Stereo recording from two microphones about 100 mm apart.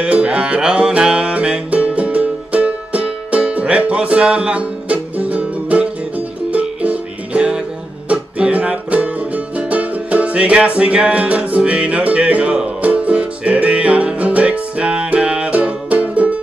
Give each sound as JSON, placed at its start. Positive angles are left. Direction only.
{"t": 0.0, "sound": "music", "side_deg": -10}